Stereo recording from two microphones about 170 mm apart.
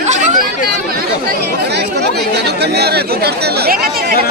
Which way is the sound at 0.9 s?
65° right (ahead or behind).